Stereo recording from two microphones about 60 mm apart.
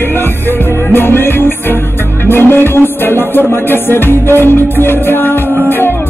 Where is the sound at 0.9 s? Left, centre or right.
Left.